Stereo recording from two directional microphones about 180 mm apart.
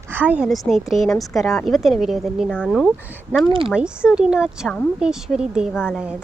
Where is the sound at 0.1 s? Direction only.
10° right (ahead or behind).